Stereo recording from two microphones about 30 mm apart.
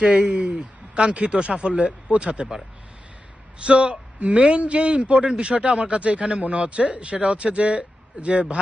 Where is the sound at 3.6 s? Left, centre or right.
Right.